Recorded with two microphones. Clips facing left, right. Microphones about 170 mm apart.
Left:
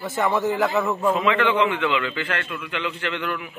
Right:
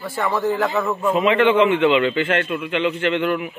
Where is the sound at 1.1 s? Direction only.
20° right (ahead or behind).